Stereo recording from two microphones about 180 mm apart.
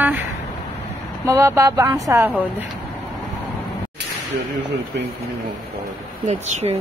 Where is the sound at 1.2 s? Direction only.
15° right (ahead or behind).